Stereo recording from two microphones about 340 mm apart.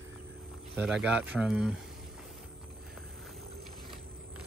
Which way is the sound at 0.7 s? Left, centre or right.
Centre.